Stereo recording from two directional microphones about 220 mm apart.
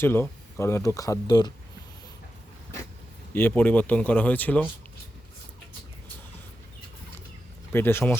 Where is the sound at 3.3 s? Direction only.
10° left (ahead or behind).